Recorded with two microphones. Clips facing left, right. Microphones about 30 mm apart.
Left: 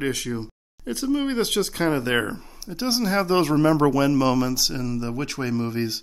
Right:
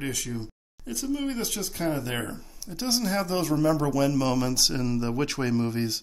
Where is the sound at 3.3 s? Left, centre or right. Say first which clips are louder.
Left 6 dB; left.